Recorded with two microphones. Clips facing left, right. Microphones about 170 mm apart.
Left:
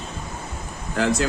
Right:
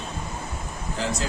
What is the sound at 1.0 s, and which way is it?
Speech, 65° left (ahead or behind).